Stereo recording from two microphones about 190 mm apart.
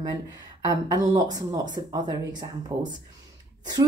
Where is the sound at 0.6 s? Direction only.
20° right (ahead or behind).